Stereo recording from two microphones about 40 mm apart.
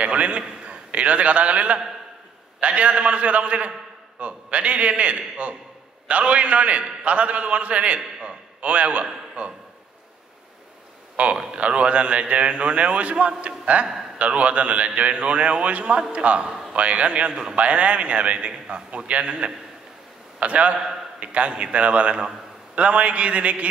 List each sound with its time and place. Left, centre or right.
0.0 s a man's voice: right
11.2 s a man's voice: right